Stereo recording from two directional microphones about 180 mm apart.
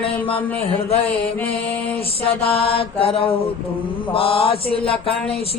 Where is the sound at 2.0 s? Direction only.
30° left (ahead or behind).